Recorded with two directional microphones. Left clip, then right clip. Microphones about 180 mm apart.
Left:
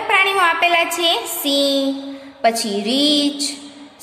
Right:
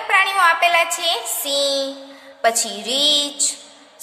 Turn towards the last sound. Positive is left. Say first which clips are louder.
# even
turn(degrees=-20)  # may be behind; listen again after turning